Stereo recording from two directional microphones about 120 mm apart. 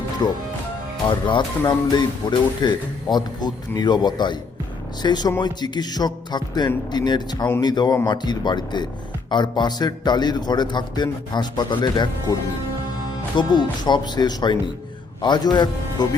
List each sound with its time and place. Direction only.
0.2 s a man's voice: 35° left (ahead or behind)